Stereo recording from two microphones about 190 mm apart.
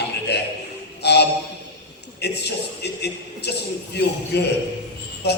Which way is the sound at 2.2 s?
60° left (ahead or behind).